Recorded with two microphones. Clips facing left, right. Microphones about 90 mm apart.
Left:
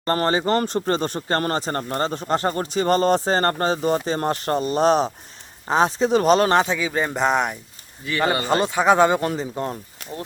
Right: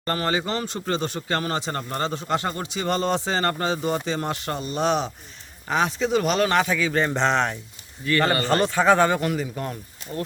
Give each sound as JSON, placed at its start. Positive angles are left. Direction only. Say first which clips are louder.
{"t": 0.0, "sound": "speech", "louder": "left 4 dB", "side_deg": 35}
{"t": 6.7, "sound": "speech", "louder": "even", "side_deg": 10}
{"t": 9.2, "sound": "speech", "louder": "left 2 dB", "side_deg": 30}